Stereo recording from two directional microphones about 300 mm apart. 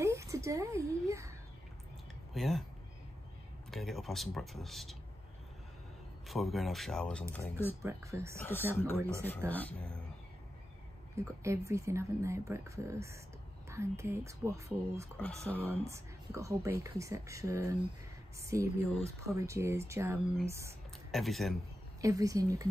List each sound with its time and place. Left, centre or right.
0.0 s a sound: centre
2.3 s speech: centre
3.7 s speech: centre
6.2 s speech: centre
7.8 s speech: centre
8.4 s speech: centre
11.1 s speech: centre
15.1 s speech: centre
15.9 s speech: centre
22.0 s speech: centre